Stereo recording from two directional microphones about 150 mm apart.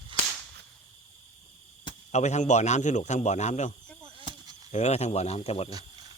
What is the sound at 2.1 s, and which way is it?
A man's voice, 50° left (ahead or behind).